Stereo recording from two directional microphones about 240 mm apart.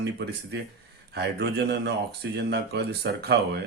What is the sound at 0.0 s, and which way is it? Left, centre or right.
Speech, right.